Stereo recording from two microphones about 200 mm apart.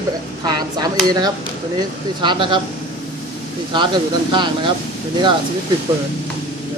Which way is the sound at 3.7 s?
20° right (ahead or behind).